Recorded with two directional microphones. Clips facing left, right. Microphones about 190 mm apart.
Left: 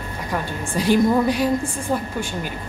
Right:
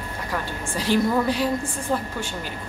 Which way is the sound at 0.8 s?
15° left (ahead or behind).